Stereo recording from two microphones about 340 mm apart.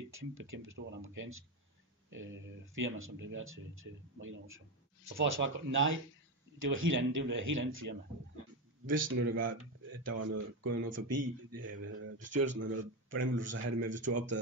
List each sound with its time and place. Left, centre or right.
0.1 s speech: right
13.5 s speech: right